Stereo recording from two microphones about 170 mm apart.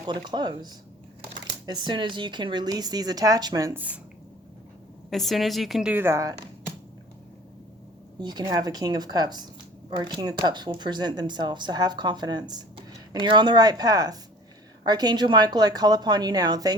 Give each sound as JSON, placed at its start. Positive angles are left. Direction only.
{"t": 0.0, "sound": "speech", "side_deg": -25}
{"t": 5.1, "sound": "speech", "side_deg": 0}
{"t": 8.2, "sound": "speech", "side_deg": -25}